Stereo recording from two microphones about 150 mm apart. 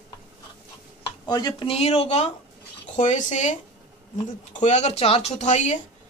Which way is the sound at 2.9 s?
55° left (ahead or behind).